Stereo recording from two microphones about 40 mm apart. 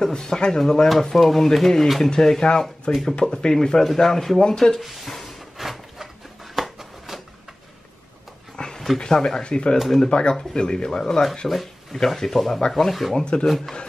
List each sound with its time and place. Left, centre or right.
0.0 s speech: centre
4.7 s a sound: centre
8.7 s dog: centre
9.0 s speech: centre
9.8 s speech: centre
10.0 s speech: left
11.4 s speech: centre
13.1 s speech: left